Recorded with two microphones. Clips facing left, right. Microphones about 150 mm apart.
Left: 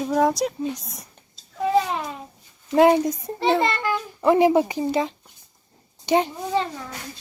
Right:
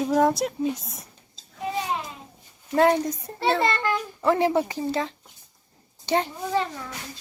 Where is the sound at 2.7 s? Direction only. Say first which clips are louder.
Left 4 dB; 15° left (ahead or behind).